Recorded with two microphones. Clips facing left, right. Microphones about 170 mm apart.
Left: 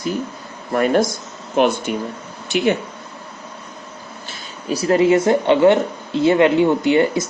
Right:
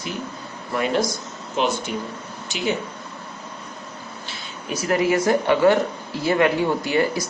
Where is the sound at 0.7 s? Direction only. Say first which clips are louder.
Left 6 dB; 50° left (ahead or behind).